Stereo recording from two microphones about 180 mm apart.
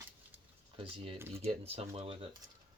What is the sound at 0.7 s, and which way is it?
Speech, 30° right (ahead or behind).